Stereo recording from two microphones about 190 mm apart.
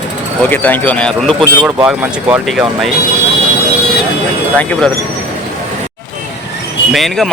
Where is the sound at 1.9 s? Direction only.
5° right (ahead or behind).